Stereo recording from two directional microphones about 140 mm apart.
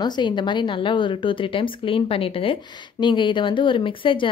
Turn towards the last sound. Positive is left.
turn(degrees=40)  # may be behind; listen again after turning